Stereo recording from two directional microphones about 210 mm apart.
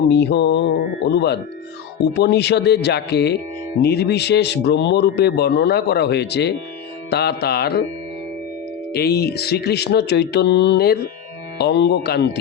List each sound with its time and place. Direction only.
0.1 s speech: 55° left (ahead or behind)
8.9 s speech: 50° left (ahead or behind)